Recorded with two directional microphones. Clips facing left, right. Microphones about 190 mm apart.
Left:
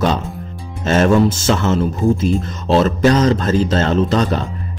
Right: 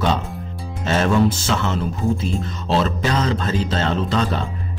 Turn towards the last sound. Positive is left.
turn(degrees=45)  # may be behind; listen again after turning